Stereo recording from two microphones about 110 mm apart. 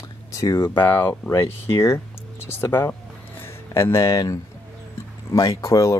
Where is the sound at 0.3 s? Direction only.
30° left (ahead or behind).